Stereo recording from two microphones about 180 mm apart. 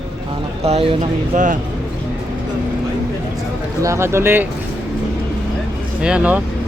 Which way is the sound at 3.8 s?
15° right (ahead or behind).